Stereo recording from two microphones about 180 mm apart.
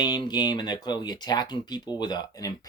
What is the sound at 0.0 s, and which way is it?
Speech, 25° left (ahead or behind).